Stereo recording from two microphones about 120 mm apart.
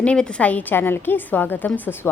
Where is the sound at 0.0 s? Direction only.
10° left (ahead or behind).